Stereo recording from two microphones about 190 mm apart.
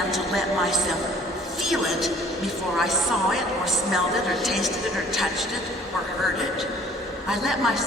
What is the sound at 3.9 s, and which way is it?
Speech, centre (ahead or behind).